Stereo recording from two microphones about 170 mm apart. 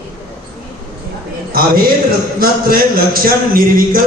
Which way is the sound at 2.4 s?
60° right (ahead or behind).